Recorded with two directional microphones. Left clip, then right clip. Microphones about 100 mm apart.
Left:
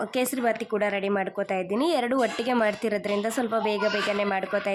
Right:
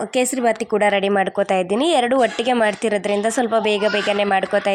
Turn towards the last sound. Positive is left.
turn(degrees=-35)  # may be behind; listen again after turning